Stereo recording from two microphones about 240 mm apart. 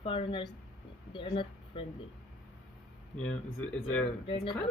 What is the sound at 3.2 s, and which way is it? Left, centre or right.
Speech, centre.